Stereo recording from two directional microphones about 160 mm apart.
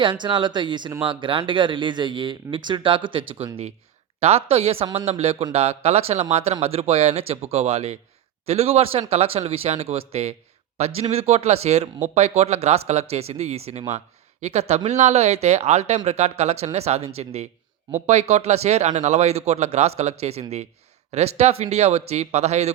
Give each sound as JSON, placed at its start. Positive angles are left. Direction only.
{"t": 0.0, "sound": "speech", "side_deg": -30}